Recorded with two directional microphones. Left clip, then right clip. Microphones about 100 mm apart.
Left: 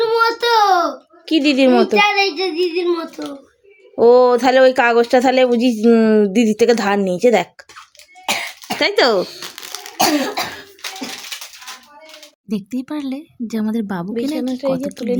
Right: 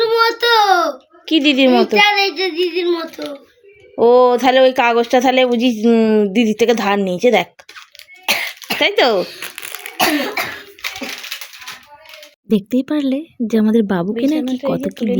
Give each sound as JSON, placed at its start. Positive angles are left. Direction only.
{"t": 0.0, "sound": "a child's voice", "side_deg": -5}
{"t": 8.3, "sound": "cough", "side_deg": 10}
{"t": 9.1, "sound": "speech", "side_deg": 30}
{"t": 12.5, "sound": "speech", "side_deg": -30}
{"t": 12.9, "sound": "a woman's voice", "side_deg": -20}